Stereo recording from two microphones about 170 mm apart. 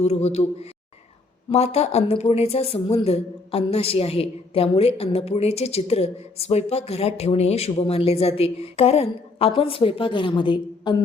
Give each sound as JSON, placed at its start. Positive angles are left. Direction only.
{"t": 0.0, "sound": "a woman's voice", "side_deg": 40}